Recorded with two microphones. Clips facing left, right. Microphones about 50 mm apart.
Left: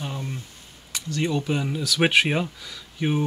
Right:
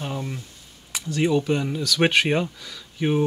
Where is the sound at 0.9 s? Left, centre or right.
Centre.